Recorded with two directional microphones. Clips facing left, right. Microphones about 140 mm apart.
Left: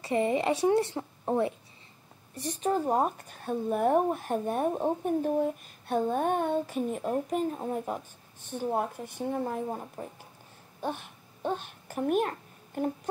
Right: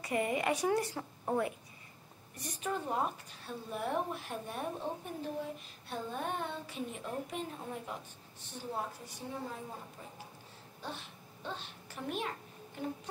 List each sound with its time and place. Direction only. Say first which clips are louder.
0.0 s speech: left 6 dB; 25° left (ahead or behind); by 10.0 s 55° left (ahead or behind)
10.8 s babbling: left 10 dB; 55° left (ahead or behind)